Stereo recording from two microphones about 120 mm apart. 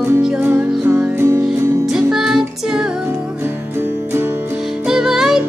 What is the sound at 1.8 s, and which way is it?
Music, 5° right (ahead or behind).